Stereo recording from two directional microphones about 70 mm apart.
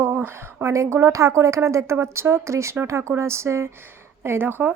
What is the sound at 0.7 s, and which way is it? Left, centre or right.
Speech, right.